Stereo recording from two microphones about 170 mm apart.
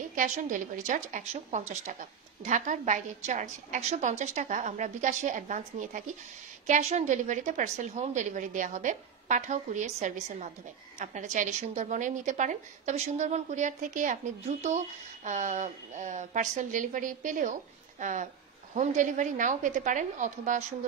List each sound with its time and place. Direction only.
0.1 s a woman's voice: 50° right (ahead or behind)